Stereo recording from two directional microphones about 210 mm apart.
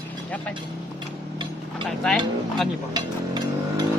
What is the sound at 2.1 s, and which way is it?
Speech, 5° left (ahead or behind).